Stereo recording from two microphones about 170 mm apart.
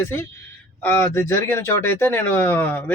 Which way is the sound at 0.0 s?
15° left (ahead or behind).